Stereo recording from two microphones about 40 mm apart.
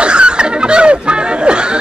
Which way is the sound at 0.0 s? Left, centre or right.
Right.